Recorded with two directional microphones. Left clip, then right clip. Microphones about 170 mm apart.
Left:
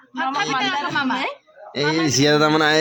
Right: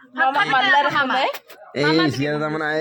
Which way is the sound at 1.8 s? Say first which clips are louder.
Right 3 dB; 70° right (ahead or behind).